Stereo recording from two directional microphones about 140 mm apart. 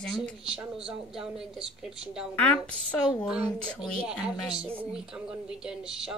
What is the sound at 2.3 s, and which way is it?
Speech, 10° left (ahead or behind).